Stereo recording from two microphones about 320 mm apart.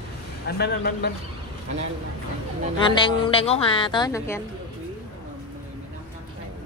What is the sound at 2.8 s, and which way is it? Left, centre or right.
A woman's voice, centre.